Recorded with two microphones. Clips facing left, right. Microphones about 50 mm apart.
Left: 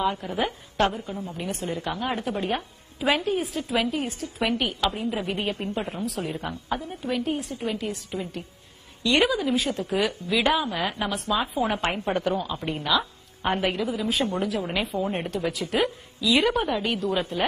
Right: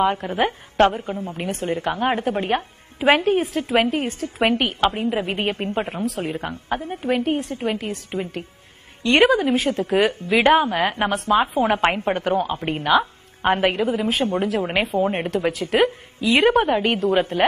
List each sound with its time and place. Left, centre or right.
0.0 s a woman's voice: right